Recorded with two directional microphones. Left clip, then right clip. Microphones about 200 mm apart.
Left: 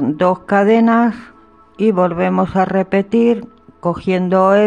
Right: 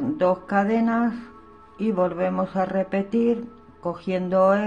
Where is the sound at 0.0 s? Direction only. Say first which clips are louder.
Left 7 dB; 45° left (ahead or behind).